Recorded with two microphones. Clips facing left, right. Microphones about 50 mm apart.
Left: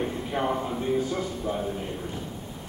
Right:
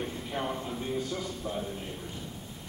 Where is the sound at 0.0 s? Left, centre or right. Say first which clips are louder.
Left 6 dB; centre.